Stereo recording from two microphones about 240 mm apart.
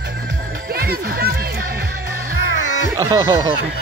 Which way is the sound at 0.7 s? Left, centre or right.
Right.